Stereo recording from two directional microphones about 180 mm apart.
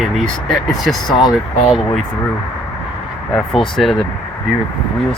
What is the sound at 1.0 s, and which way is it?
Speech, 25° left (ahead or behind).